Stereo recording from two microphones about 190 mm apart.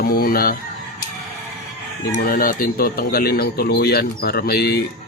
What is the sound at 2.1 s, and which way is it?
Speech, 50° left (ahead or behind).